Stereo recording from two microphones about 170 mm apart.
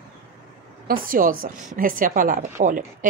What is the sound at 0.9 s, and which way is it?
A woman's voice, 55° right (ahead or behind).